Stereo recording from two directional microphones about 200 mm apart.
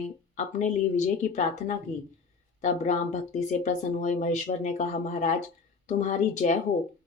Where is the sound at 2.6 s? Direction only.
35° left (ahead or behind).